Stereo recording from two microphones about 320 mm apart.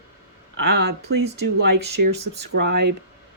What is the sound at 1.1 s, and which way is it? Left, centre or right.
Speech, right.